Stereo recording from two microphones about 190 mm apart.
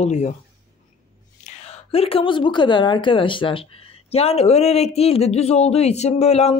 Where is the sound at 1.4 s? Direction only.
35° left (ahead or behind).